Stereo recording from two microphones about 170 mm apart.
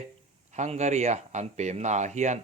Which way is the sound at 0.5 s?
40° right (ahead or behind).